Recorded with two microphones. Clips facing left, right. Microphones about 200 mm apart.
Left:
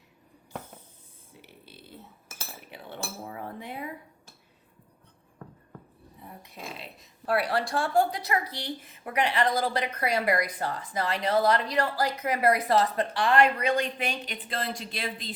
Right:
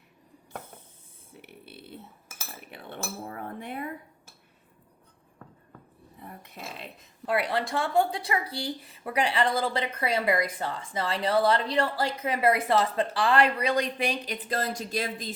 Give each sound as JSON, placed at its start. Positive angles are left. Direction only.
{"t": 1.4, "sound": "a sound", "side_deg": -60}
{"t": 2.6, "sound": "cutlery", "side_deg": -55}
{"t": 7.3, "sound": "a woman's voice", "side_deg": -20}